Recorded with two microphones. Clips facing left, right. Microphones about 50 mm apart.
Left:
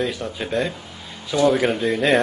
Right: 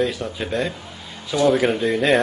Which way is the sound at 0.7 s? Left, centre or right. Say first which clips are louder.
Right 1 dB; right.